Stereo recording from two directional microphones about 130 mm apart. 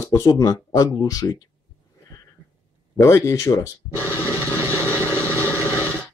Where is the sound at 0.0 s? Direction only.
25° left (ahead or behind).